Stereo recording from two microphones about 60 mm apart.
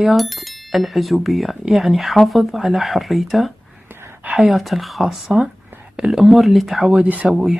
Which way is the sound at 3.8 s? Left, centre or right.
Right.